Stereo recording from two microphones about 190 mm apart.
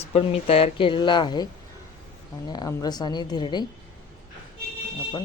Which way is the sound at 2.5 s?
20° left (ahead or behind).